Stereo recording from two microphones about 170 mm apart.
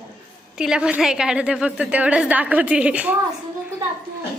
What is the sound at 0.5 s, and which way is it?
A woman's voice, 5° right (ahead or behind).